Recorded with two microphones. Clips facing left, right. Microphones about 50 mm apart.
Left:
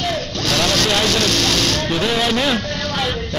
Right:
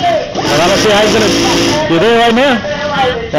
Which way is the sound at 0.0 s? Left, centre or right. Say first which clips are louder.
Right 10 dB; right.